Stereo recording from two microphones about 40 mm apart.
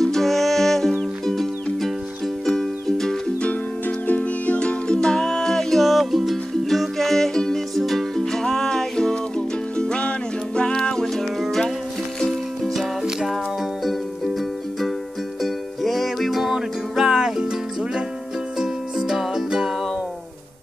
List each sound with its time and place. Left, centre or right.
0.0 s music: centre
4.2 s music: left
5.2 s music: centre
5.8 s music: centre
13.0 s music: centre
15.4 s music: centre
16.5 s music: centre